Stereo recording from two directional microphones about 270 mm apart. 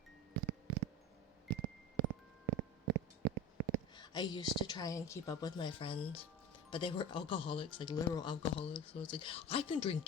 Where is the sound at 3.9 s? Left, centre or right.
Centre.